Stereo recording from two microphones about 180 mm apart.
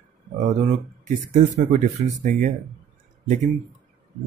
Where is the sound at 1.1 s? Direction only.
40° right (ahead or behind).